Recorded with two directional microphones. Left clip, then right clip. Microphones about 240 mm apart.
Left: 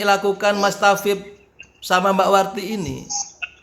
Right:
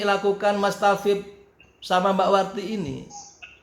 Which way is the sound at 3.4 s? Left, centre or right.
Left.